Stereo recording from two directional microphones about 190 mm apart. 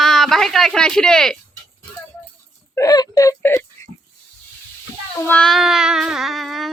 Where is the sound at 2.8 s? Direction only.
20° left (ahead or behind).